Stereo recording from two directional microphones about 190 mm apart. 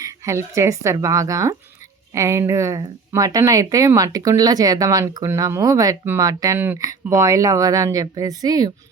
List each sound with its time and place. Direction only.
0.0 s speech: 15° right (ahead or behind)